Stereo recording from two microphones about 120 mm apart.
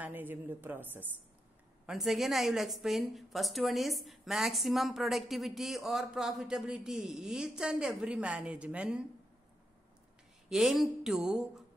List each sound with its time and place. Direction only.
0.0 s a woman's voice: 15° right (ahead or behind)
1.9 s a woman's voice: centre (ahead or behind)
10.5 s a woman's voice: centre (ahead or behind)